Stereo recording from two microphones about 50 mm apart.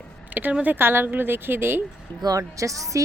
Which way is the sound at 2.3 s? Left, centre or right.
Right.